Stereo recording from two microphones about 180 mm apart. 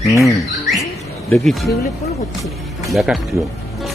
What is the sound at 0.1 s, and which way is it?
Speech, 15° left (ahead or behind).